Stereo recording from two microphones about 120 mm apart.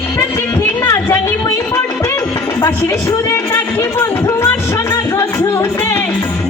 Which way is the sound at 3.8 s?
25° left (ahead or behind).